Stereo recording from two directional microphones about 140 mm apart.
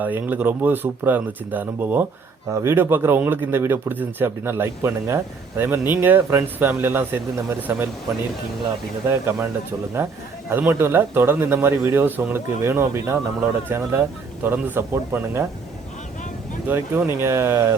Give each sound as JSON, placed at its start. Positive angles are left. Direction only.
{"t": 0.0, "sound": "speech", "side_deg": -15}
{"t": 9.0, "sound": "speech", "side_deg": -15}
{"t": 10.5, "sound": "speech", "side_deg": -15}
{"t": 16.6, "sound": "speech", "side_deg": -15}